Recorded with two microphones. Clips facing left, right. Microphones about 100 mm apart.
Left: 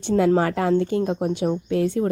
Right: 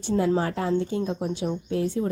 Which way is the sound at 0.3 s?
80° left.